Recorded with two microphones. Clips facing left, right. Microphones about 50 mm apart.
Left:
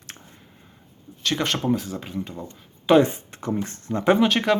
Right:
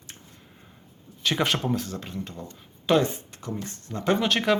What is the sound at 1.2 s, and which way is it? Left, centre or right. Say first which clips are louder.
Speech: even; centre.